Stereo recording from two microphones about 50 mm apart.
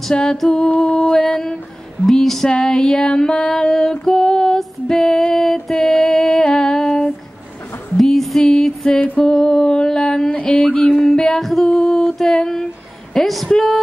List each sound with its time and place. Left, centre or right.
0.1 s music: centre
9.2 s a sound: centre
10.3 s music: left; by 11.6 s centre
11.6 s a sound: centre
13.1 s a woman's voice: centre
13.5 s music: centre